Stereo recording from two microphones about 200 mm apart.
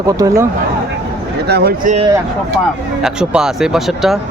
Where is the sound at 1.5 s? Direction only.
50° right (ahead or behind).